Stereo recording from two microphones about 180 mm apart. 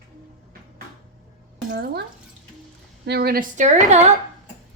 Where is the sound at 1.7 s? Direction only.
65° right (ahead or behind).